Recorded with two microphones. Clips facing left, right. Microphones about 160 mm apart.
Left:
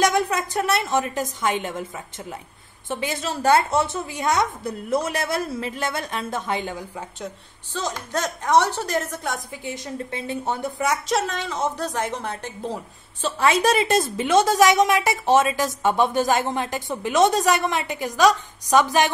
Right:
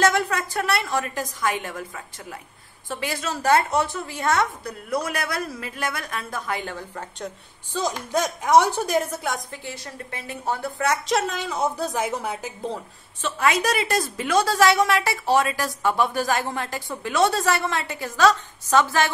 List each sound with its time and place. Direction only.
0.0 s a woman's voice: 20° left (ahead or behind)
2.9 s a woman's voice: 20° left (ahead or behind); by 7.3 s 5° left (ahead or behind)
7.7 s a woman's voice: 15° right (ahead or behind)
9.7 s a woman's voice: 20° left (ahead or behind)
11.1 s a woman's voice: centre (ahead or behind)
13.2 s a woman's voice: 30° left (ahead or behind)